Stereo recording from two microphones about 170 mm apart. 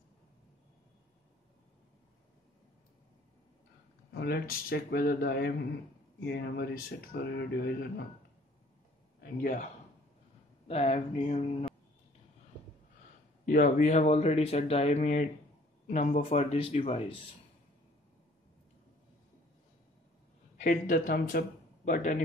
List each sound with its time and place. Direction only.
4.1 s speech: 80° left
9.2 s speech: 55° left (ahead or behind)
10.7 s speech: 40° left (ahead or behind)
13.5 s speech: 45° left (ahead or behind)
20.5 s speech: 50° left (ahead or behind)